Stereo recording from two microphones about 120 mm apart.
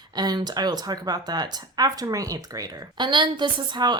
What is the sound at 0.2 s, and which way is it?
Speech, 35° right (ahead or behind).